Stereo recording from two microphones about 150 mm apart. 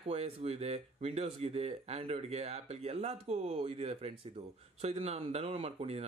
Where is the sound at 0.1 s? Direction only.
45° right (ahead or behind).